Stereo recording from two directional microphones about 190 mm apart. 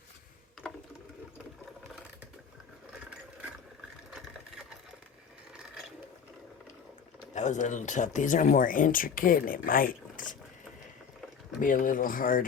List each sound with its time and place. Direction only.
7.3 s speech: 40° left (ahead or behind)
11.6 s speech: 45° left (ahead or behind)